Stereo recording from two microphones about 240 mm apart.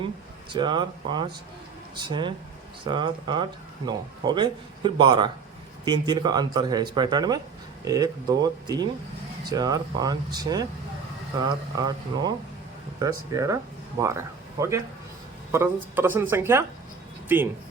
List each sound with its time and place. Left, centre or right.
0.5 s speech: centre